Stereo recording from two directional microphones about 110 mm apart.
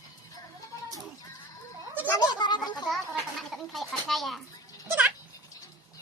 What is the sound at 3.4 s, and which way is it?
Speech, centre (ahead or behind).